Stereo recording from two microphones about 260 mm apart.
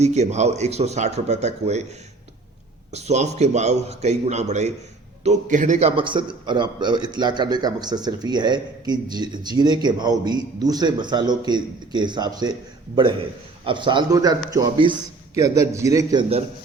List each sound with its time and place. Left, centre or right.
0.0 s a man's voice: right
2.9 s a man's voice: right
13.7 s a man's voice: centre